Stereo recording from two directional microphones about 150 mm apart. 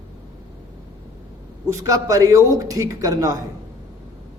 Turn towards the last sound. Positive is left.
turn(degrees=-20)  # may be behind; listen again after turning